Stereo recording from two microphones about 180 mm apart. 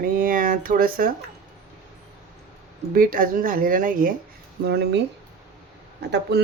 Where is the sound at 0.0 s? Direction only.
50° right (ahead or behind).